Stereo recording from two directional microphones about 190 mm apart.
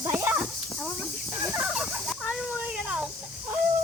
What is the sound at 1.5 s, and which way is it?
Fowl, 5° right (ahead or behind).